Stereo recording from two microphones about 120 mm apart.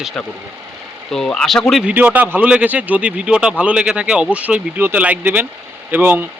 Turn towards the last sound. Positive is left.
turn(degrees=-15)  # may be behind; listen again after turning